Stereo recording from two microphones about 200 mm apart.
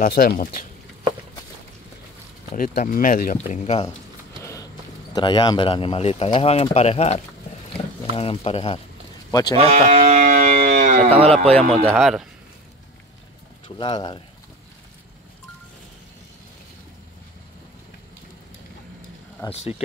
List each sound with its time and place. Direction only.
0.0 s speech: 50° left (ahead or behind)
2.5 s speech: 45° left (ahead or behind)
4.4 s a sound: 15° left (ahead or behind)
5.1 s speech: 25° left (ahead or behind)
9.6 s speech: 30° right (ahead or behind)
10.2 s a sound: 40° right (ahead or behind)
11.8 s speech: centre (ahead or behind)
13.7 s speech: 25° left (ahead or behind)
19.5 s speech: 30° left (ahead or behind)